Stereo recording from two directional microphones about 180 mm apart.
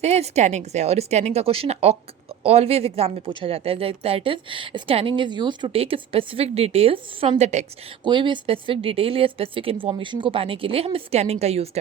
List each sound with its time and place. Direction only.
0.0 s a woman's voice: 35° right (ahead or behind)
8.0 s a woman's voice: 25° right (ahead or behind)